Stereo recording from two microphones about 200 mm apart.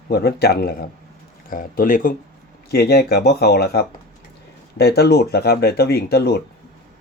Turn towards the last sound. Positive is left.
turn(degrees=55)  # may be behind; listen again after turning